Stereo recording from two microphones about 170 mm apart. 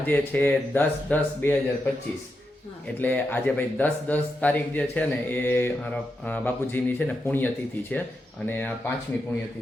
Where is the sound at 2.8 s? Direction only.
10° left (ahead or behind).